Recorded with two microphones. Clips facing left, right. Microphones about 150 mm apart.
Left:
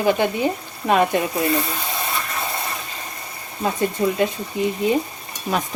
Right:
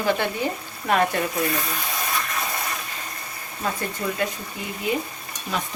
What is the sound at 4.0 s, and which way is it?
Speech, 25° left (ahead or behind).